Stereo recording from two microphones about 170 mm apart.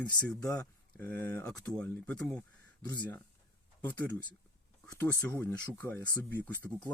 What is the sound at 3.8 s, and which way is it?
Speech, 10° left (ahead or behind).